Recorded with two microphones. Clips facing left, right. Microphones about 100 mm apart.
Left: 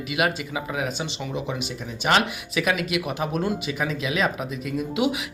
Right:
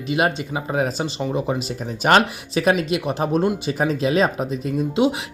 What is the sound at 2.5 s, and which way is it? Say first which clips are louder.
Speech: right 6 dB; 35° right (ahead or behind).